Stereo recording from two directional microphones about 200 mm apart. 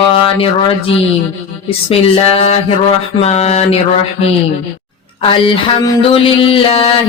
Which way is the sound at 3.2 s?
30° left (ahead or behind).